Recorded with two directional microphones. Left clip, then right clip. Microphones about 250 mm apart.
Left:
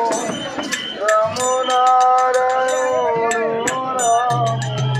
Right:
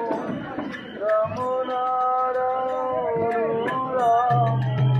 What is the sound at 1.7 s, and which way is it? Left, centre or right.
Music, left.